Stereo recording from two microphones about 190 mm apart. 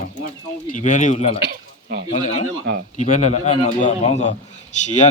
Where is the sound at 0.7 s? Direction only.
40° left (ahead or behind).